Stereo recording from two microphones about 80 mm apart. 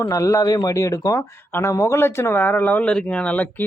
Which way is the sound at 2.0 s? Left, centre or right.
Left.